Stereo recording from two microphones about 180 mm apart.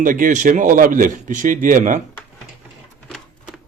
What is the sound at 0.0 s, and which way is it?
Speech, 45° right (ahead or behind).